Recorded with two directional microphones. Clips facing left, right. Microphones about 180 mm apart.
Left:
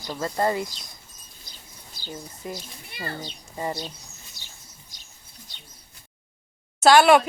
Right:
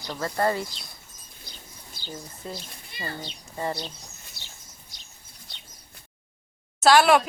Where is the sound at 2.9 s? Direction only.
65° left (ahead or behind).